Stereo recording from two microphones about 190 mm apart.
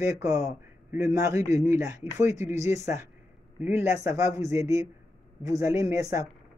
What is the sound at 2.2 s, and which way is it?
Speech, 35° left (ahead or behind).